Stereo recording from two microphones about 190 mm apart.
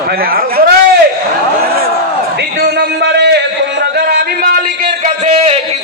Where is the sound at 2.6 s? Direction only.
60° right (ahead or behind).